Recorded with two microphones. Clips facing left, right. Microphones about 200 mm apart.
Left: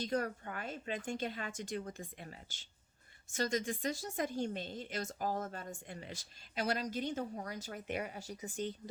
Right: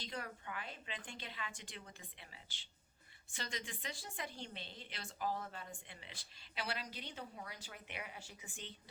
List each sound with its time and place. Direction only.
0.0 s a woman's voice: 45° left (ahead or behind)